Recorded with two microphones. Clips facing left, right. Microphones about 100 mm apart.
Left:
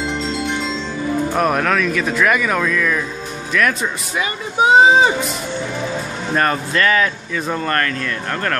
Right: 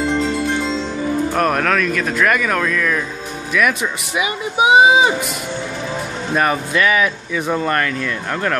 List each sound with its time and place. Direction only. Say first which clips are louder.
0.0 s marimba: right 4 dB; 25° left (ahead or behind)
1.3 s speech: left 1 dB; centre (ahead or behind)
6.3 s speech: right 1 dB; 10° right (ahead or behind)